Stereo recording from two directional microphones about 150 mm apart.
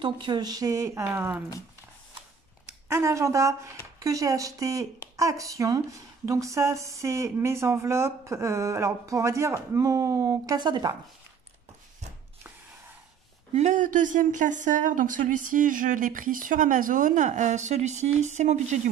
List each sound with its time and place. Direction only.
0.0 s speech: 30° right (ahead or behind); by 1.4 s 15° right (ahead or behind)
2.9 s speech: 20° right (ahead or behind)
13.6 s speech: 55° right (ahead or behind)